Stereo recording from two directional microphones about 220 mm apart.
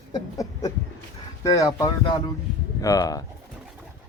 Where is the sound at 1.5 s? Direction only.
15° left (ahead or behind).